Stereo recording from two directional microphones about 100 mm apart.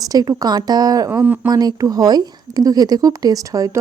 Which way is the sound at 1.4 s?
40° right (ahead or behind).